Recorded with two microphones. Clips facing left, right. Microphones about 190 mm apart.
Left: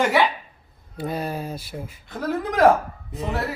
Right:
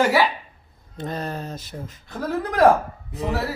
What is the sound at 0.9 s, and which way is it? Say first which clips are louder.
Speech: left 2 dB; 10° left (ahead or behind).